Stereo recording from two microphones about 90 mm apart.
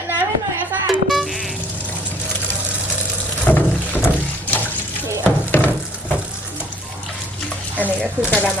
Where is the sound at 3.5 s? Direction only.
20° left (ahead or behind).